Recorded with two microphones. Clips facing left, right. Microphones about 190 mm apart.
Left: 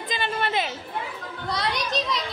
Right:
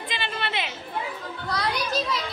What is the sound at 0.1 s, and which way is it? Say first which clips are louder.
Chatter: left 5 dB; 40° left (ahead or behind).